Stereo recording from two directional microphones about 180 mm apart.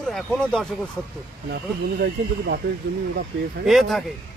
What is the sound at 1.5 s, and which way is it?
Speech, 65° right (ahead or behind).